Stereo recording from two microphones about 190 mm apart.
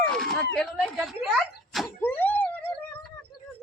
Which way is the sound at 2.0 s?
10° left (ahead or behind).